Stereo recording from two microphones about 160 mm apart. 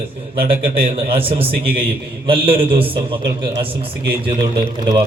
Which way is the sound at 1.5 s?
75° right (ahead or behind).